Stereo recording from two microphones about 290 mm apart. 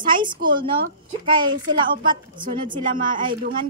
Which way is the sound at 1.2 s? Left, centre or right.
Centre.